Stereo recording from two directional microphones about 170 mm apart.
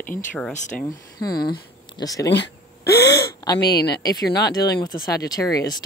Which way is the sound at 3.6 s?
75° left (ahead or behind).